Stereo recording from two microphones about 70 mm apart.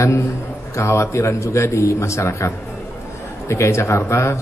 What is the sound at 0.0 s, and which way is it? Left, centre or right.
A man's voice, left.